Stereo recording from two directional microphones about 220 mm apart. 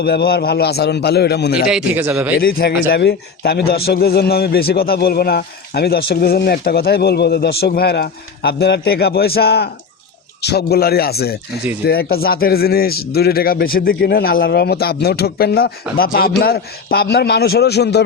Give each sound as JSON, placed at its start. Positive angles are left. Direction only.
{"t": 0.0, "sound": "a man's voice", "side_deg": 45}
{"t": 1.7, "sound": "speech", "side_deg": -5}
{"t": 2.4, "sound": "a man's voice", "side_deg": 45}